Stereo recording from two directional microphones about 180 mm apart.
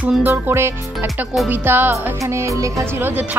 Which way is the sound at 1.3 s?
Centre (ahead or behind).